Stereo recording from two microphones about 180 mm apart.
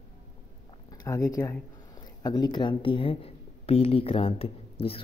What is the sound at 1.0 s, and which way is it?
A man's voice, 20° left (ahead or behind).